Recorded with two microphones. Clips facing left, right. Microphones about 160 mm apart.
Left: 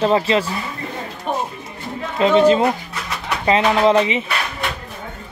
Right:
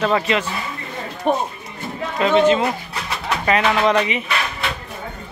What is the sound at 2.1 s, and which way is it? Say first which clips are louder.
Speech: left 2 dB; 30° left (ahead or behind).